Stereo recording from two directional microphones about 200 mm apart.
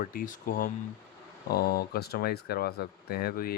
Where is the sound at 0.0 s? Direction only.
45° left (ahead or behind).